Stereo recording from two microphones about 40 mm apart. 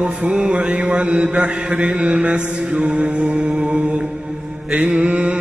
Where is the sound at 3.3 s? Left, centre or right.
Right.